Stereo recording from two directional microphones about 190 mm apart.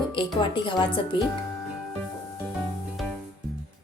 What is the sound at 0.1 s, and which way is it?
Speech, 25° left (ahead or behind).